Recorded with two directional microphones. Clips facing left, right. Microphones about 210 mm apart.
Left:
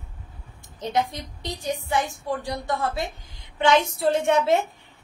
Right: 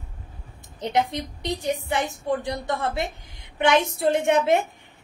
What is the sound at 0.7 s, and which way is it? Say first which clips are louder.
Speech: right 2 dB; 20° right (ahead or behind).